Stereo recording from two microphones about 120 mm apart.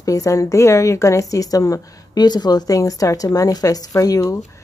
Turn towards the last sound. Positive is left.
turn(degrees=30)  # may be behind; listen again after turning